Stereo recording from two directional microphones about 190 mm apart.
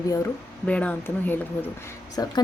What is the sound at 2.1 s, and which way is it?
Speech, 20° left (ahead or behind).